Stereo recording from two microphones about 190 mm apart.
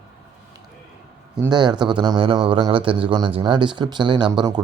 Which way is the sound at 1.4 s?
20° right (ahead or behind).